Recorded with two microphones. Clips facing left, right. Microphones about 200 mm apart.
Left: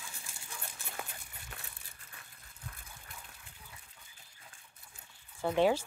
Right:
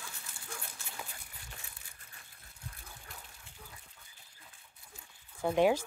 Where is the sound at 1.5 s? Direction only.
55° left (ahead or behind).